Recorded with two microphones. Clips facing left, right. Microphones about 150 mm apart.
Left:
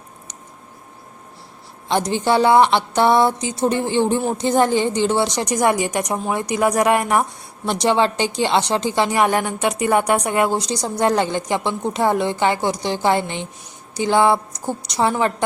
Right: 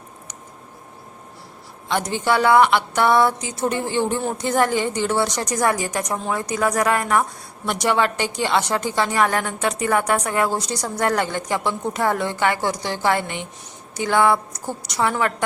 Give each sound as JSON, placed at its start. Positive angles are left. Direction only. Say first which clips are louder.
{"t": 1.9, "sound": "a woman's voice", "louder": "left 3 dB", "side_deg": 25}